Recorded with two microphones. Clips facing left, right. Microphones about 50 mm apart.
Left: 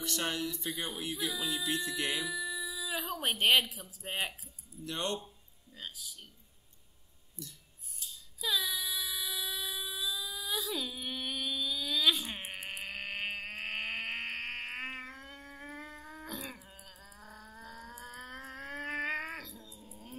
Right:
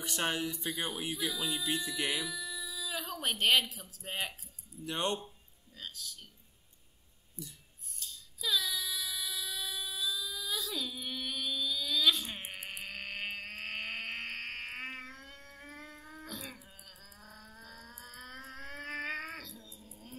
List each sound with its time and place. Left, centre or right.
0.0 s speech: centre
1.1 s music: centre
2.2 s speech: centre
2.5 s a sound: centre
3.1 s a woman's voice: centre
4.8 s speech: right
5.8 s a woman's voice: centre
8.0 s a sound: centre
16.2 s livestock: centre
17.6 s a sound: centre